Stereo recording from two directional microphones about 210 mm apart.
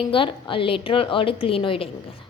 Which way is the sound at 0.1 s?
25° left (ahead or behind).